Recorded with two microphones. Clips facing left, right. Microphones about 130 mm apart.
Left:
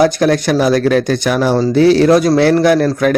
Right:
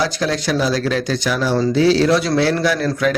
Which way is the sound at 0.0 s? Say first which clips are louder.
Left 8 dB; 55° left (ahead or behind).